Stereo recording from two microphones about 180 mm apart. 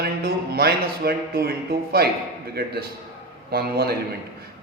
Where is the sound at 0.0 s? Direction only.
60° right (ahead or behind).